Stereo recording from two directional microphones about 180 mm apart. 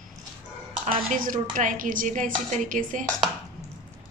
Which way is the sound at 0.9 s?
50° right (ahead or behind).